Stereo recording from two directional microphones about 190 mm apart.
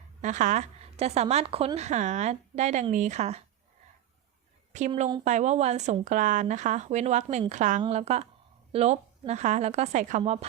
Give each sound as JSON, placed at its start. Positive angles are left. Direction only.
{"t": 0.2, "sound": "a woman's voice", "side_deg": -40}
{"t": 4.7, "sound": "a woman's voice", "side_deg": -40}